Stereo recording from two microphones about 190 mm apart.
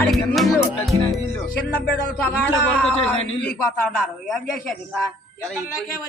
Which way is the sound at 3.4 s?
5° left (ahead or behind).